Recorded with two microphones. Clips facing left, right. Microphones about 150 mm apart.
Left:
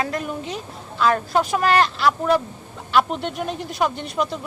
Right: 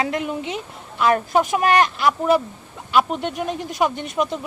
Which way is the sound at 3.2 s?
45° right (ahead or behind).